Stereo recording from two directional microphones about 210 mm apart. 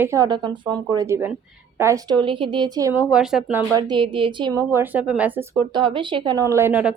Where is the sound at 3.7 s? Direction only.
20° right (ahead or behind).